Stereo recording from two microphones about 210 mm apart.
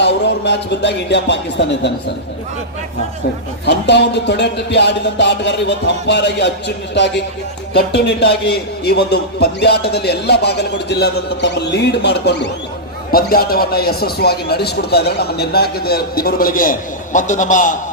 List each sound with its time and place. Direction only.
0.0 s speech: 55° left (ahead or behind)
3.7 s a man's voice: 55° left (ahead or behind); by 17.7 s 40° left (ahead or behind)